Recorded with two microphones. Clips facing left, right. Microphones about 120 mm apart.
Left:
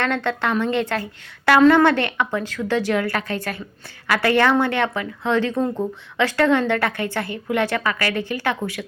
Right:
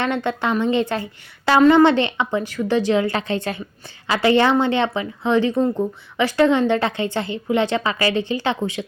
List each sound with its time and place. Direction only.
0.0 s a woman's voice: 15° right (ahead or behind)